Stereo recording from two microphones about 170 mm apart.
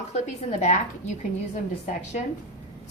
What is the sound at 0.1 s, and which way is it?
Speech, 45° left (ahead or behind).